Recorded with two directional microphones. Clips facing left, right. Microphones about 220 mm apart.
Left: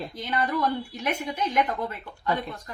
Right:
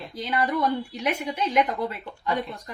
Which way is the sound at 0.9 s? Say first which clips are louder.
Right 2 dB; 15° right (ahead or behind).